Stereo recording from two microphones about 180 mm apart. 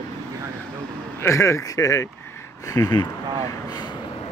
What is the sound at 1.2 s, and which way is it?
Speech, 15° left (ahead or behind).